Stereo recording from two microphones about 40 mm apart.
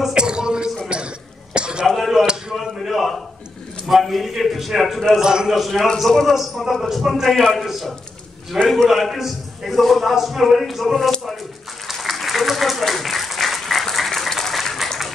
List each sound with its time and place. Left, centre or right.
0.1 s a sound: right
1.5 s cough: right
2.0 s a sound: centre
5.2 s a man's voice: centre
5.5 s a man's voice: centre
6.3 s a man's voice: centre
11.9 s applause: centre